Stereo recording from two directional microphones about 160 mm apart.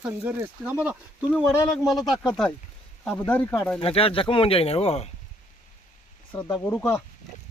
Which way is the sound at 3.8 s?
35° left (ahead or behind).